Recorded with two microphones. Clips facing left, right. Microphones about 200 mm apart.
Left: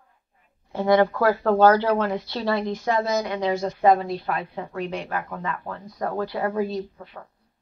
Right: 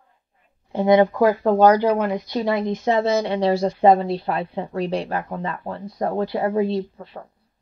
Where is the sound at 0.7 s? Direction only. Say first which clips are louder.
Right 3 dB; 20° right (ahead or behind).